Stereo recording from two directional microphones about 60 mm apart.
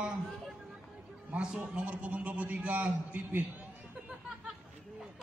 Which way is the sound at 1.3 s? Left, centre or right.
Centre.